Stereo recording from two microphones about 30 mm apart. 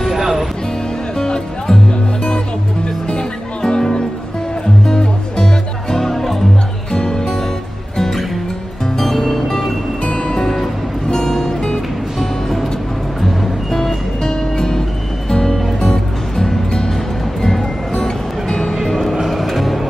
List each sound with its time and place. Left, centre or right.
0.1 s music: centre
1.1 s music: left
2.2 s music: left
4.8 s music: centre
6.9 s music: left
8.0 s music: centre
12.2 s music: centre
17.9 s music: left
18.9 s music: centre
19.2 s vehicle: centre